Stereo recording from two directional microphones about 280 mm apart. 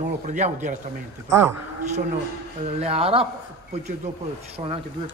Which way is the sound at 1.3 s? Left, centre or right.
Centre.